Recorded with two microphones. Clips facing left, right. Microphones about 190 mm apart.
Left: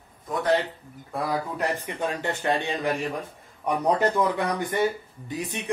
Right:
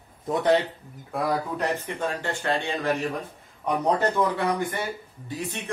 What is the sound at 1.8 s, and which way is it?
Speech, 15° left (ahead or behind).